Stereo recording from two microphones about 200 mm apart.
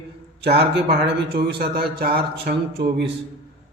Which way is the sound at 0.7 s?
55° right (ahead or behind).